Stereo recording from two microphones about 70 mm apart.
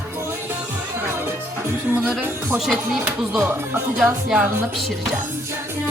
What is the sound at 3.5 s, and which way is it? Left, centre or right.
Speech, right.